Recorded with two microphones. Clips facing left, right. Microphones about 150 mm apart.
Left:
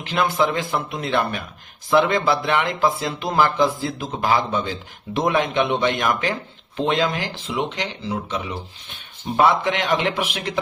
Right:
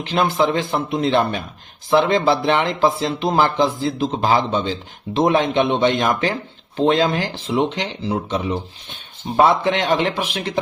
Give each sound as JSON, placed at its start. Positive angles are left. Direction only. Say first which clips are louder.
{"t": 0.0, "sound": "speech", "louder": "right 2 dB", "side_deg": -25}